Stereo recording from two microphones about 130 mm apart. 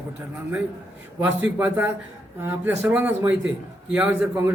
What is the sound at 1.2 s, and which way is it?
A man's voice, 15° right (ahead or behind).